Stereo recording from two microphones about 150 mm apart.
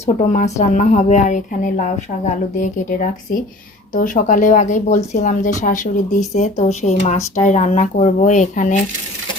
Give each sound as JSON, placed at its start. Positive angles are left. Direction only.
{"t": 0.0, "sound": "speech", "side_deg": 50}